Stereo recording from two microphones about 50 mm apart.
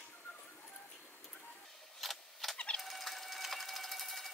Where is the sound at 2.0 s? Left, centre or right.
Centre.